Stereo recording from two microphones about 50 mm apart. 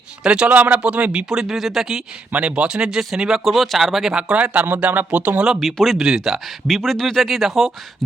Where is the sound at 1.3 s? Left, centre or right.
Centre.